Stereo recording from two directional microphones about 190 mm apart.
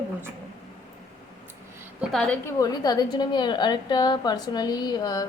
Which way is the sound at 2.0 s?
5° left (ahead or behind).